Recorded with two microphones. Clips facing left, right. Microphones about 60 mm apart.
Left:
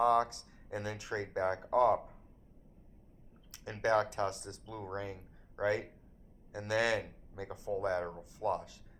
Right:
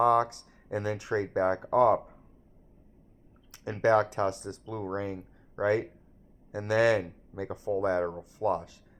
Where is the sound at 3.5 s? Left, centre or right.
Right.